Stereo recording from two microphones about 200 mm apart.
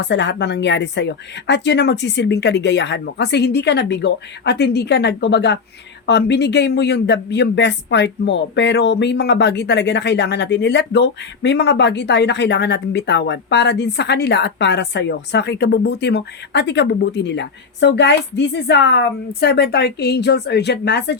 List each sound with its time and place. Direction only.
0.0 s speech: 60° left (ahead or behind)